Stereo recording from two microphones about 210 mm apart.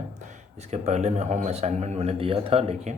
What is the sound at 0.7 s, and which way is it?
A man's voice, 30° right (ahead or behind).